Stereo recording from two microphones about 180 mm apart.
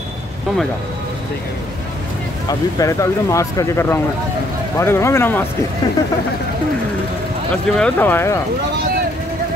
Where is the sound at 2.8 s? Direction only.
15° left (ahead or behind).